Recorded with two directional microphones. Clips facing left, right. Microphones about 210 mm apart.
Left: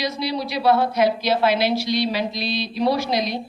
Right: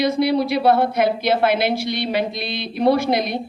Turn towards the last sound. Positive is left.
turn(degrees=-55)  # may be behind; listen again after turning